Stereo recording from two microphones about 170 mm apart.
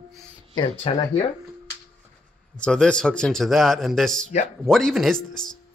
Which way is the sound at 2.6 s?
5° left (ahead or behind).